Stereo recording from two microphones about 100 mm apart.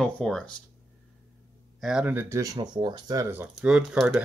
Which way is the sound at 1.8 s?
5° right (ahead or behind).